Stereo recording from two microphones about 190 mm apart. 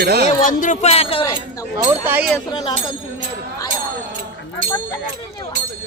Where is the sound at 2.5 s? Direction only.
25° left (ahead or behind).